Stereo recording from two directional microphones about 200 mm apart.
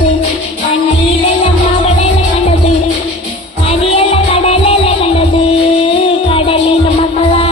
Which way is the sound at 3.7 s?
30° left (ahead or behind).